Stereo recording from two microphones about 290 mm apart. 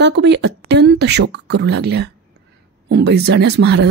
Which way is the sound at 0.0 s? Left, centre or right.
Right.